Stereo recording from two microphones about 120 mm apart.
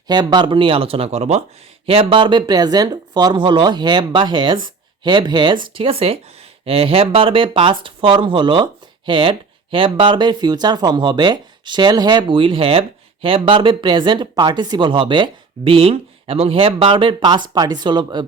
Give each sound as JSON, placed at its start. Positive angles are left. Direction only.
{"t": 0.1, "sound": "speech", "side_deg": -35}
{"t": 1.9, "sound": "speech", "side_deg": -50}